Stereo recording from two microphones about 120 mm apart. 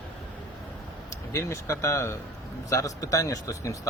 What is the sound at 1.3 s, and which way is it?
Speech, 25° left (ahead or behind).